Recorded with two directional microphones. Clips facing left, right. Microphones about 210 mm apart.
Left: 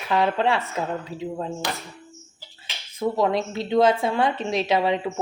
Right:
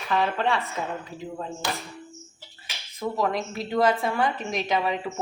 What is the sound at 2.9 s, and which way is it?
A woman's voice, 25° left (ahead or behind).